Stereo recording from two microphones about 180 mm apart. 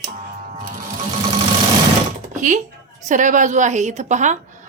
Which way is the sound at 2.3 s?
45° right (ahead or behind).